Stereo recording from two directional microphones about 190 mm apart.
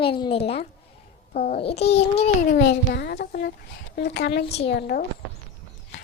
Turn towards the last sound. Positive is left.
turn(degrees=55)  # may be behind; listen again after turning